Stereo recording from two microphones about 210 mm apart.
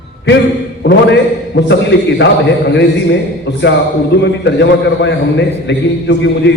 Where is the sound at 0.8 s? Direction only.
55° left (ahead or behind).